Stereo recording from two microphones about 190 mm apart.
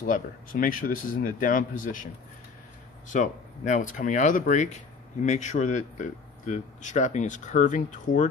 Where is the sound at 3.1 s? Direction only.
40° left (ahead or behind).